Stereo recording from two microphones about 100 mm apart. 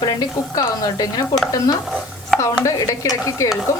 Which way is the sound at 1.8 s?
5° right (ahead or behind).